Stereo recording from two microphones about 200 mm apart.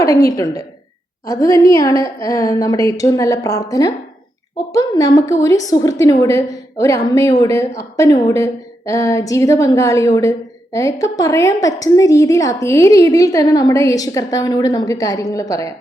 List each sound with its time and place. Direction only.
0.3 s a woman's voice: 15° left (ahead or behind)